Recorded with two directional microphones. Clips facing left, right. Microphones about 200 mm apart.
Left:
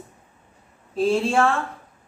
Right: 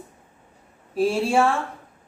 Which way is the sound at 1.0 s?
10° right (ahead or behind).